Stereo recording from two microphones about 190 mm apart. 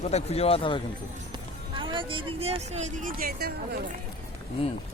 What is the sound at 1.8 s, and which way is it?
Speech, 25° right (ahead or behind).